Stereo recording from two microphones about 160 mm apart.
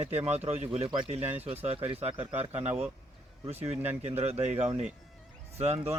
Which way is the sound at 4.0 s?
40° right (ahead or behind).